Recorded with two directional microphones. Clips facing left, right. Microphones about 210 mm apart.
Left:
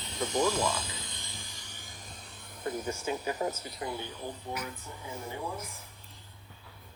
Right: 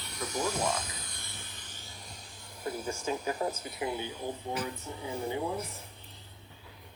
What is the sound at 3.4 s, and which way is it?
Speech, 40° left (ahead or behind).